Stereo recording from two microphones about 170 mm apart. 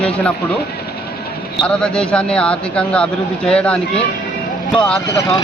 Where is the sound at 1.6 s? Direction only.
5° left (ahead or behind).